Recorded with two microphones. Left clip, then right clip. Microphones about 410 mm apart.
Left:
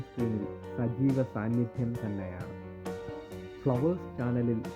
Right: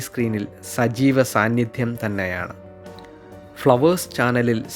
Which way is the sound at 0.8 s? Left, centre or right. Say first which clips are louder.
Right 13 dB; centre.